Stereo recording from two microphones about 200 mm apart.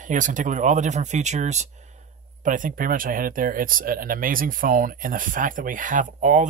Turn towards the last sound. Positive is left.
turn(degrees=-40)  # may be behind; listen again after turning